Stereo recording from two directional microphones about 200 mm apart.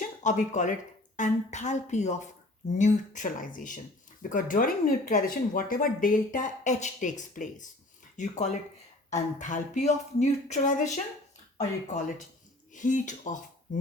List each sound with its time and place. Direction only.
0.0 s speech: 40° left (ahead or behind)